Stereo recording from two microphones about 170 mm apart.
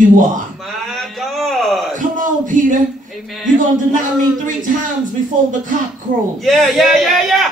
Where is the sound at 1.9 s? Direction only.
50° right (ahead or behind).